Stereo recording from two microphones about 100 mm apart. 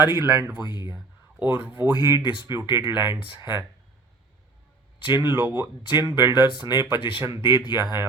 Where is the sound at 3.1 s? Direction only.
55° left (ahead or behind).